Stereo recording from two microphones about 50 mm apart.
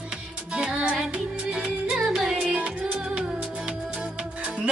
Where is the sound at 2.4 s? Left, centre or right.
Right.